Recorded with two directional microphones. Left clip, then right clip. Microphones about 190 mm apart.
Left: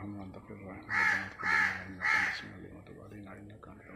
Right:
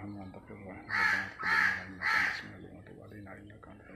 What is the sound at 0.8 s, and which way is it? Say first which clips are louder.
Speech: even; 55° left (ahead or behind).